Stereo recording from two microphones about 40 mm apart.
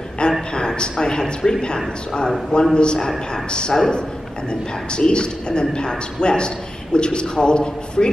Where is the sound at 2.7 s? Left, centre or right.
Left.